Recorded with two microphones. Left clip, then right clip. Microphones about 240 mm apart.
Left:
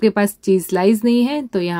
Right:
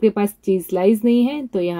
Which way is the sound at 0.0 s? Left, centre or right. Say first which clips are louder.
Left 2 dB; left.